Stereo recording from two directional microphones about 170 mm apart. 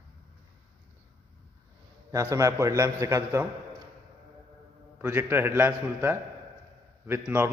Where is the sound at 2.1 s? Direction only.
20° right (ahead or behind).